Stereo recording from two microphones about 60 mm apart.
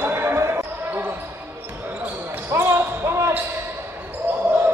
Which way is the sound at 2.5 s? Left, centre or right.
Right.